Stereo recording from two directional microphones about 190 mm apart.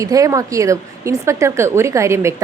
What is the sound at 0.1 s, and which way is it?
Speech, 15° right (ahead or behind).